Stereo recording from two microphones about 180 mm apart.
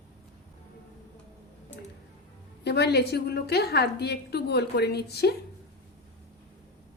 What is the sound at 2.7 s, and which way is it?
A woman's voice, 65° left (ahead or behind).